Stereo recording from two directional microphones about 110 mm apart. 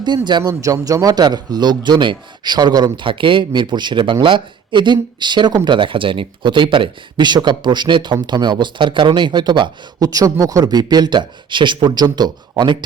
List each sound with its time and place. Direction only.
0.3 s a man's voice: 40° right (ahead or behind)
0.6 s a man's voice: 30° right (ahead or behind)